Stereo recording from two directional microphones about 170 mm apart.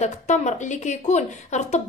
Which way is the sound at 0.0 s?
45° left (ahead or behind).